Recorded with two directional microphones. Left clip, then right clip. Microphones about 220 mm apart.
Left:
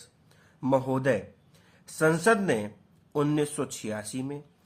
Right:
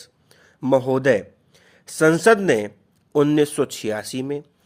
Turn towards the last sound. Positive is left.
turn(degrees=-45)  # may be behind; listen again after turning